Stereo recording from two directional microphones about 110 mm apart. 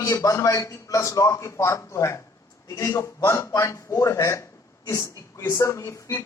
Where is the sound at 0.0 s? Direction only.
30° left (ahead or behind).